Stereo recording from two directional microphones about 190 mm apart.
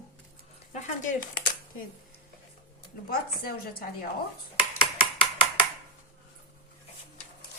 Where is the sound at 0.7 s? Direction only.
40° left (ahead or behind).